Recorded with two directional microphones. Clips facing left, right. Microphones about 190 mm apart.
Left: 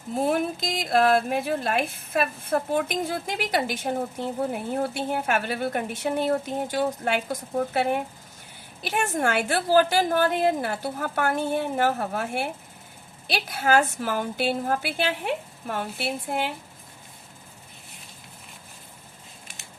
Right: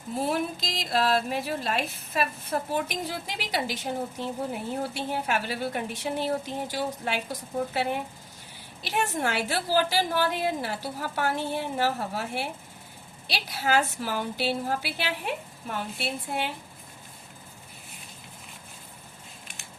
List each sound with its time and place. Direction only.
0.2 s speech: 50° left (ahead or behind)